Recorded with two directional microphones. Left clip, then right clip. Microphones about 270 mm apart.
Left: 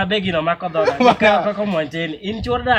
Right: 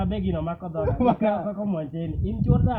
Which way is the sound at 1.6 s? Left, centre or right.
Left.